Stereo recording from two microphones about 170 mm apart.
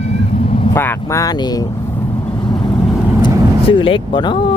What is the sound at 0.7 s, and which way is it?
Speech, 15° left (ahead or behind).